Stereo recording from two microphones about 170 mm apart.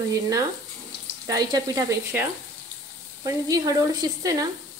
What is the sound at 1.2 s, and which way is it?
Speech, 20° right (ahead or behind).